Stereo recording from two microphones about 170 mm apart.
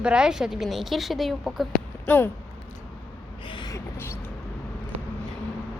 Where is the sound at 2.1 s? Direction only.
10° left (ahead or behind).